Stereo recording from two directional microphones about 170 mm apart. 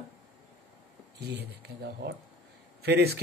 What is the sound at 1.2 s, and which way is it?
Speech, 75° right (ahead or behind).